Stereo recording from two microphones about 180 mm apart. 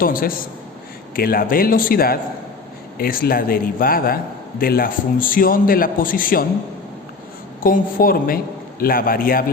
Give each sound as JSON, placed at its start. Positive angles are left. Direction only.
{"t": 0.0, "sound": "a man's voice", "side_deg": 55}
{"t": 7.6, "sound": "a man's voice", "side_deg": 50}